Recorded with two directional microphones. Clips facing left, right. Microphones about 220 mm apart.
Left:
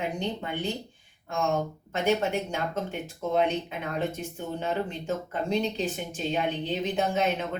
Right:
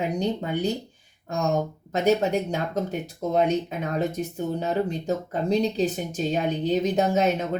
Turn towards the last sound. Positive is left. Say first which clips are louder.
# right 5 dB
turn(degrees=-40)  # may be behind; listen again after turning